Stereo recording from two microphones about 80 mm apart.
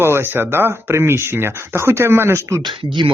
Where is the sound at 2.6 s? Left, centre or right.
Right.